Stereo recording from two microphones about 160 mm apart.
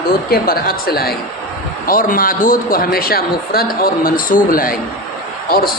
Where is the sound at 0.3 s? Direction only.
70° left (ahead or behind).